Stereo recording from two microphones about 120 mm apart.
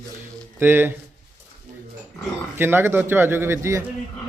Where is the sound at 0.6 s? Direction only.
15° right (ahead or behind).